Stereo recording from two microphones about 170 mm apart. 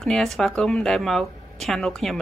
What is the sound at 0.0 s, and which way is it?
Speech, centre (ahead or behind).